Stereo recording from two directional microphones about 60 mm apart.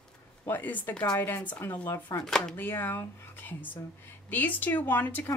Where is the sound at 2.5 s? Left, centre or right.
Left.